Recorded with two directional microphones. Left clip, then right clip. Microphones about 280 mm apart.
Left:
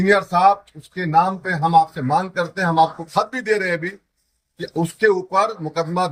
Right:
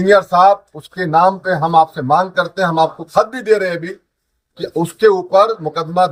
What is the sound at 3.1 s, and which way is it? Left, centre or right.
Speech, centre.